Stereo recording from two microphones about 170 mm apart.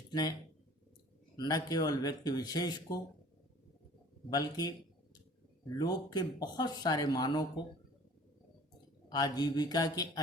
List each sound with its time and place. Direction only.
0.1 s speech: 20° left (ahead or behind)
1.4 s speech: 25° left (ahead or behind)
4.3 s speech: 20° left (ahead or behind)
5.7 s speech: 25° left (ahead or behind)
9.0 s speech: 25° left (ahead or behind)